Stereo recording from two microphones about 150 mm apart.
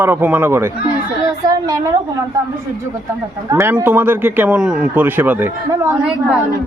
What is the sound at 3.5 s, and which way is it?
Speech, 20° right (ahead or behind).